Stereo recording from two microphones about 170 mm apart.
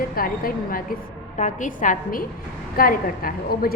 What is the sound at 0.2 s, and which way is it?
A woman's voice, 55° left (ahead or behind).